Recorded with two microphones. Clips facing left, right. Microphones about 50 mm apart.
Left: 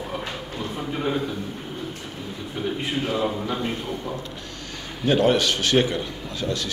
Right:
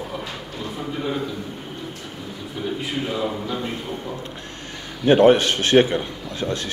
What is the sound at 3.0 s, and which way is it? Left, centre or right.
Speech, left.